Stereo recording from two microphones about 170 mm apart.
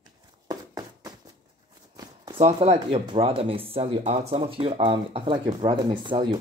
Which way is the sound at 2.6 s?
25° right (ahead or behind).